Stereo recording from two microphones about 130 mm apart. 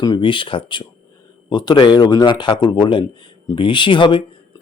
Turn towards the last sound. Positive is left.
turn(degrees=40)  # may be behind; listen again after turning